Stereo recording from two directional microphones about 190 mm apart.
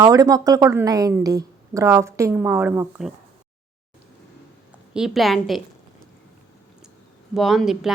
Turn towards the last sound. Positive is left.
turn(degrees=0)  # may be behind; listen again after turning